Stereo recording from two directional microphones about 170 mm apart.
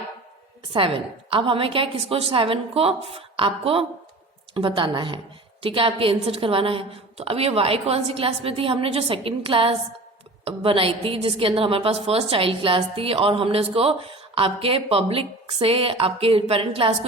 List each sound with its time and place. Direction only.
0.7 s a woman's voice: 30° right (ahead or behind)